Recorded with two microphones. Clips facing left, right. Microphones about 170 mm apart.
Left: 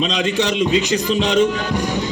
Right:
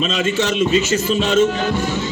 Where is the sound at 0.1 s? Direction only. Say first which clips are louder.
Even; 15° left (ahead or behind).